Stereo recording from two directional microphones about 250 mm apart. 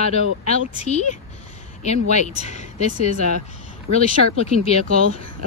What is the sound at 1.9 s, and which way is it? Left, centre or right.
Speech, left.